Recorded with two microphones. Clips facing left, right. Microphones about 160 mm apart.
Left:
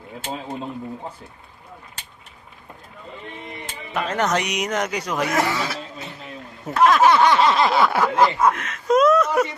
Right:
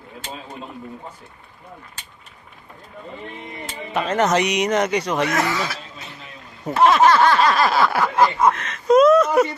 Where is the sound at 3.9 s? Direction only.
Centre (ahead or behind).